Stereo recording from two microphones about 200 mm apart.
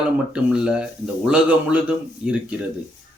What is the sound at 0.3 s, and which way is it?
A man's voice, 5° right (ahead or behind).